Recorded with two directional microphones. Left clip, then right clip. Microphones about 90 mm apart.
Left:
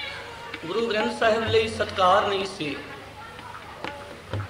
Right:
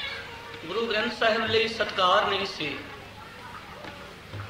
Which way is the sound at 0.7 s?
40° right (ahead or behind).